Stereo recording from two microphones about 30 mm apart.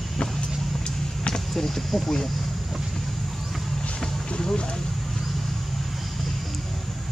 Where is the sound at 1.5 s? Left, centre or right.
Centre.